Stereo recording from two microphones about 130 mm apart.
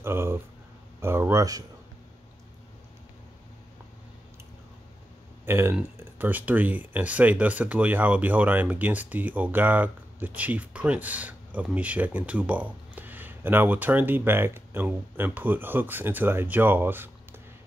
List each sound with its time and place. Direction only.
0.0 s a sound: 20° right (ahead or behind)
1.0 s speech: 20° right (ahead or behind)
5.4 s speech: 20° right (ahead or behind)